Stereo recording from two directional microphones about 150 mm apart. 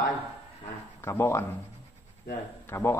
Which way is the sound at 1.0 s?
15° left (ahead or behind).